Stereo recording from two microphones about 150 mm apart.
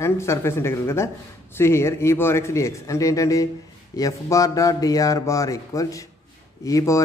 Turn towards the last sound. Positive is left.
turn(degrees=20)  # may be behind; listen again after turning